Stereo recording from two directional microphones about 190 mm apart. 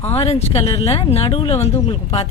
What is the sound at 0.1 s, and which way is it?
Speech, 30° left (ahead or behind).